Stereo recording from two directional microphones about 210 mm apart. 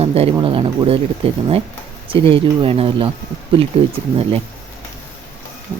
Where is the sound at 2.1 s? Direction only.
25° right (ahead or behind).